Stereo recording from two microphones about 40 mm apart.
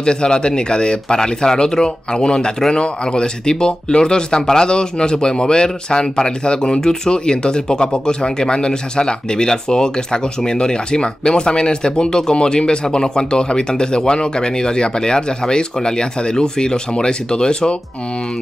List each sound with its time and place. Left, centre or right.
0.0 s speech: left